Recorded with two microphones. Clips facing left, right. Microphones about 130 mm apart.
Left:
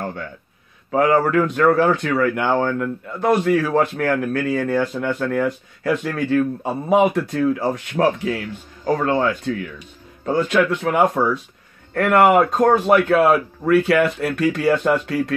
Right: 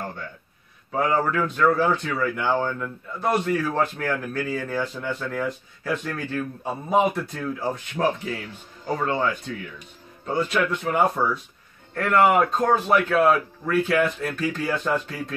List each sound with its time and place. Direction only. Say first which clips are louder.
0.9 s a man's voice: left 6 dB; 85° left
11.9 s a man's voice: left 5 dB; 70° left (ahead or behind)